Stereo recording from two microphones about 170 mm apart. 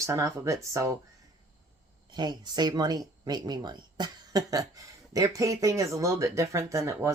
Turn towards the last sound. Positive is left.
turn(degrees=-15)  # may be behind; listen again after turning